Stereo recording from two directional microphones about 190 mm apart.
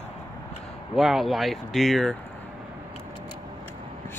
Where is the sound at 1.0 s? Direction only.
Centre (ahead or behind).